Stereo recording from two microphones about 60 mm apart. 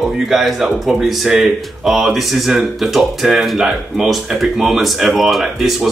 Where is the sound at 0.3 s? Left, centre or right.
Centre.